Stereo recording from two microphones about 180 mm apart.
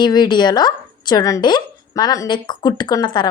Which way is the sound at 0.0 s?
25° left (ahead or behind).